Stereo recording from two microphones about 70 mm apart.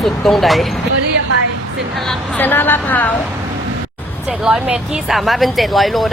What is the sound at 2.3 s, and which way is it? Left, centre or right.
Speech, left.